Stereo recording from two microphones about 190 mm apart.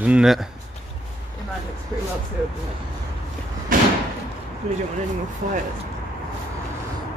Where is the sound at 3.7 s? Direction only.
45° right (ahead or behind).